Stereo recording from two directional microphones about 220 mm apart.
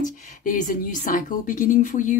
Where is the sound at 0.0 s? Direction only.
35° left (ahead or behind).